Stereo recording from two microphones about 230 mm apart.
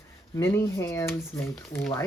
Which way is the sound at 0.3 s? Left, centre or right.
Centre.